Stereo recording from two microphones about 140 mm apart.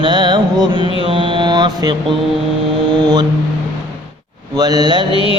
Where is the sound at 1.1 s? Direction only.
35° right (ahead or behind).